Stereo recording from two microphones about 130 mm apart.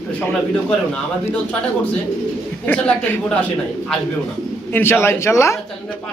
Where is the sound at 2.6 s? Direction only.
15° left (ahead or behind).